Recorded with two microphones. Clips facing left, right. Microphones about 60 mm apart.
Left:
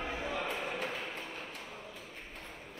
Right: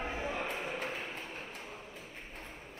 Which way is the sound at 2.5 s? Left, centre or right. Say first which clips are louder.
Even; left.